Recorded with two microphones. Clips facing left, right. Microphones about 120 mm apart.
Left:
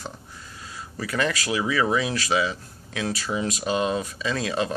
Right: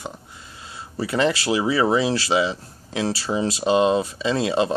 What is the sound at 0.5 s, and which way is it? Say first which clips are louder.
Speech: right 6 dB; 25° right (ahead or behind).